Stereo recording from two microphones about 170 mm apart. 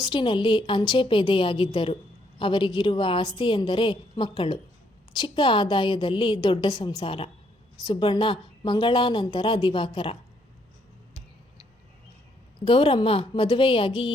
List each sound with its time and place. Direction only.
0.0 s a woman's voice: 30° left (ahead or behind)
12.5 s a woman's voice: 35° left (ahead or behind)